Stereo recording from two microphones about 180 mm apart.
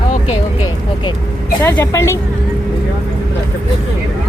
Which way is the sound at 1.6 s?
15° left (ahead or behind).